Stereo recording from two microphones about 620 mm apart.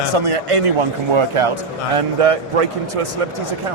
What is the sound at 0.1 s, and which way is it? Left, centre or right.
Speech, right.